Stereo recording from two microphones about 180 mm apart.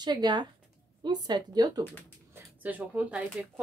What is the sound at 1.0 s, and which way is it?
Speech, 25° right (ahead or behind).